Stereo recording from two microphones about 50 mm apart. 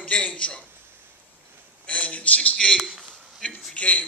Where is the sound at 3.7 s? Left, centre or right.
Left.